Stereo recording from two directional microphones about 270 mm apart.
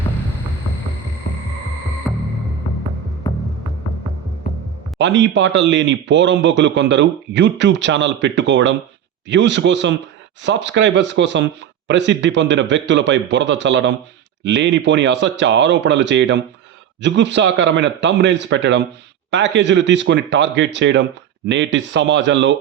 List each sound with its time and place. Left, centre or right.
2.1 s music: centre
4.9 s a man's voice: right